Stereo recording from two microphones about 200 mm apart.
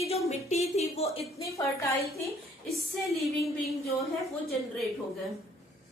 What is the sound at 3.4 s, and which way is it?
Speech, centre (ahead or behind).